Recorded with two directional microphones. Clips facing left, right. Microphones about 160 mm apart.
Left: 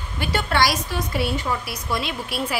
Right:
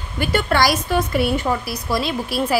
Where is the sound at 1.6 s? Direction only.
35° right (ahead or behind).